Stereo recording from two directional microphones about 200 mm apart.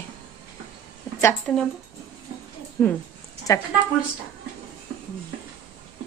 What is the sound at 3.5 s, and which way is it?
Speech, 15° left (ahead or behind).